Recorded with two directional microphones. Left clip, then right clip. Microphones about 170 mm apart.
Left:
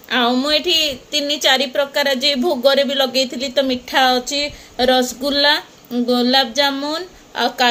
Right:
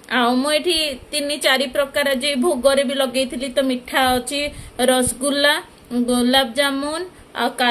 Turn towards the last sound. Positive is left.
turn(degrees=5)  # may be behind; listen again after turning